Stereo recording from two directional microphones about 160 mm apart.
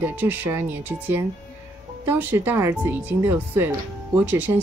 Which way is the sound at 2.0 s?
15° right (ahead or behind).